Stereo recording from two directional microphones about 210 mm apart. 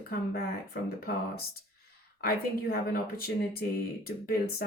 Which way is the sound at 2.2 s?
45° left (ahead or behind).